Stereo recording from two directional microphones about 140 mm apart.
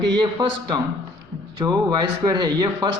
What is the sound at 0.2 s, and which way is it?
Speech, 30° right (ahead or behind).